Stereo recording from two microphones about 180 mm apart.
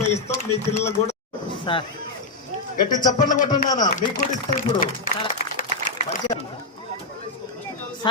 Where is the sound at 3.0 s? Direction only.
20° left (ahead or behind).